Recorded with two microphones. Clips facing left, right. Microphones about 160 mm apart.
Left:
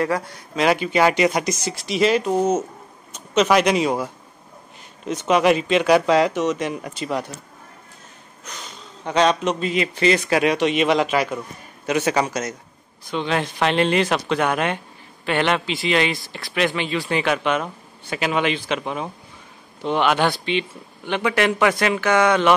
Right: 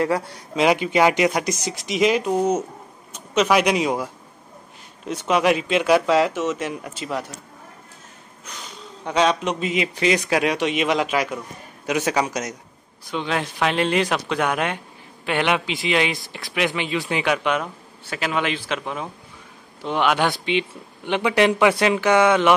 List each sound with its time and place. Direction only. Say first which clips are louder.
0.0 s a man's voice: right 1 dB; 25° right (ahead or behind); by 4.1 s 5° right (ahead or behind)
5.3 s speech: left 2 dB; 5° right (ahead or behind)
9.0 s a man's voice: left 2 dB; 10° right (ahead or behind)